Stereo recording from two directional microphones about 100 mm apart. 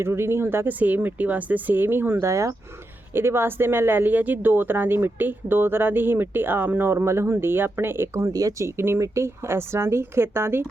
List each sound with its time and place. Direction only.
0.0 s speech: 25° right (ahead or behind)